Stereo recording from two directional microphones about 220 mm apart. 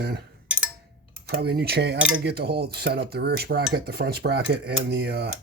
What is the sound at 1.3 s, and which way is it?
Dishes, 45° right (ahead or behind).